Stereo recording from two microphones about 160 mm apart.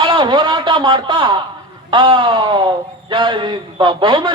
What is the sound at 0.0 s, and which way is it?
A man's voice, 30° right (ahead or behind).